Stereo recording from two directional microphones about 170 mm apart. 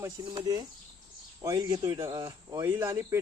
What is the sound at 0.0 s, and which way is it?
Speech, 25° right (ahead or behind).